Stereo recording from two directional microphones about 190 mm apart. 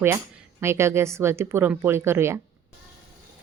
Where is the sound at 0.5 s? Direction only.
15° right (ahead or behind).